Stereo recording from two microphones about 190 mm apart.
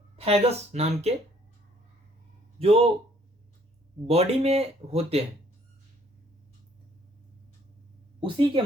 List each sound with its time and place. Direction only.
0.2 s speech: 30° right (ahead or behind)
2.6 s speech: 30° right (ahead or behind)
4.0 s speech: 30° right (ahead or behind)
8.2 s a woman's voice: 25° right (ahead or behind)